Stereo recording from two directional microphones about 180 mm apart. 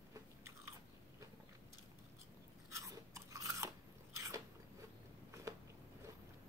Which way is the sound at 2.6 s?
15° right (ahead or behind).